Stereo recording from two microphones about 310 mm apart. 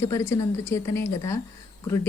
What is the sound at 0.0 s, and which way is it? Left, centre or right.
Speech, centre.